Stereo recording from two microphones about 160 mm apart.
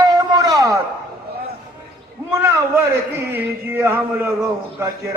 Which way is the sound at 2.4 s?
15° right (ahead or behind).